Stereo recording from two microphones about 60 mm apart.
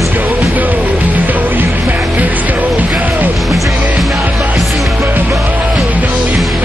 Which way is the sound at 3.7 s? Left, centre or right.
Right.